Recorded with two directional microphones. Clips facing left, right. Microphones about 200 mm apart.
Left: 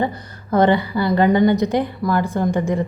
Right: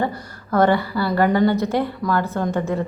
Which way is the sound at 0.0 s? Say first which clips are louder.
Left 1 dB; 20° left (ahead or behind).